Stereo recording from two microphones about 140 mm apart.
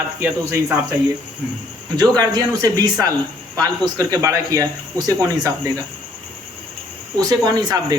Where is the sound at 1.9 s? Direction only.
30° right (ahead or behind).